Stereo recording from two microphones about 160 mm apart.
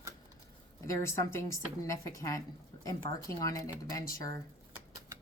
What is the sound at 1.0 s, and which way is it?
A woman's voice, 15° left (ahead or behind).